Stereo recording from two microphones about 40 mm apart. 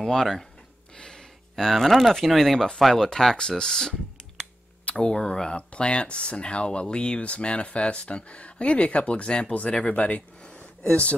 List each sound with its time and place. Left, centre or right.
0.0 s speech: centre
0.9 s a sound: centre
1.5 s speech: centre
4.9 s speech: centre